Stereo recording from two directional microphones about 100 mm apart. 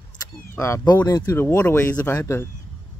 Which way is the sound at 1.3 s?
25° left (ahead or behind).